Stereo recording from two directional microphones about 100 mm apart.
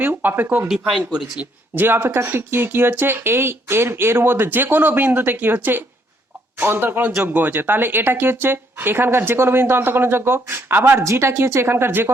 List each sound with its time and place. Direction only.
0.0 s speech: 20° right (ahead or behind)
0.7 s speech: 5° right (ahead or behind); by 12.1 s 20° right (ahead or behind)